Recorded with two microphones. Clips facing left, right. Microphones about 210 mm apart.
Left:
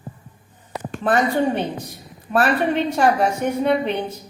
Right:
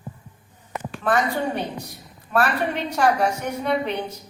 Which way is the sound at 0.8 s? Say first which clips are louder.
Left 2 dB; 35° left (ahead or behind).